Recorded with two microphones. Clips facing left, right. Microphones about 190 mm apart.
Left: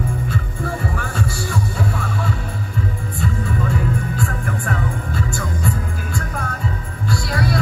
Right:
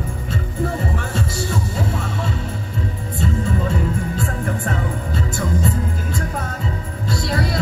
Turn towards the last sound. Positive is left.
turn(degrees=-25)  # may be behind; listen again after turning